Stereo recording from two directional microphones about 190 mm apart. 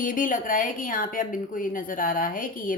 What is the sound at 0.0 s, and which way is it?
A woman's voice, 45° left (ahead or behind).